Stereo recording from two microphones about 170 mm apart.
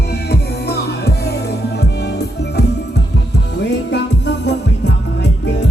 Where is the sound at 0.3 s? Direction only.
75° left (ahead or behind).